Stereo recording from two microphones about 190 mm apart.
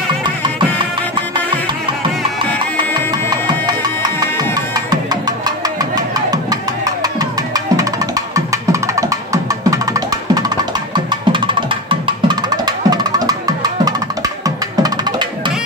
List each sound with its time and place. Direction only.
2.8 s music: 20° right (ahead or behind)